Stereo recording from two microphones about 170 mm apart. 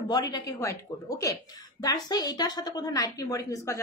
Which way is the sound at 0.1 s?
20° left (ahead or behind).